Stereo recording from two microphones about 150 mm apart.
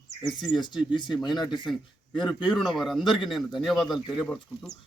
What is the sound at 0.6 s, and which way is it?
Speech, 30° left (ahead or behind).